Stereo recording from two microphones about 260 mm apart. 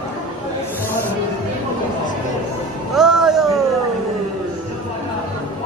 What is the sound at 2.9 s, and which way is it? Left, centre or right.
Music, centre.